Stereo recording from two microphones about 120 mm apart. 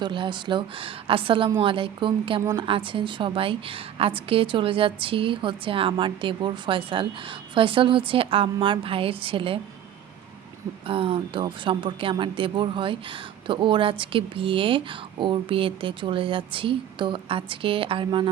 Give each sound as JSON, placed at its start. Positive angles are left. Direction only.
{"t": 0.0, "sound": "a woman's voice", "side_deg": -40}
{"t": 2.4, "sound": "a woman's voice", "side_deg": -30}
{"t": 2.6, "sound": "a woman's voice", "side_deg": -45}
{"t": 10.8, "sound": "a woman's voice", "side_deg": -50}